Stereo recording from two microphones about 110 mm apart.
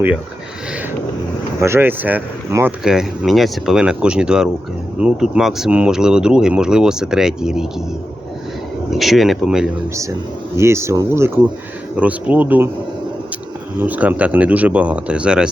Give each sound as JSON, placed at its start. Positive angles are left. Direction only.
{"t": 1.6, "sound": "speech", "side_deg": -20}
{"t": 2.8, "sound": "speech", "side_deg": -5}
{"t": 8.9, "sound": "speech", "side_deg": 0}
{"t": 10.6, "sound": "speech", "side_deg": -25}
{"t": 11.9, "sound": "speech", "side_deg": -10}
{"t": 13.7, "sound": "speech", "side_deg": -15}